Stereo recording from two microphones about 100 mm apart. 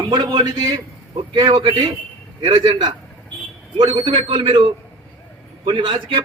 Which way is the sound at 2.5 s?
50° right (ahead or behind).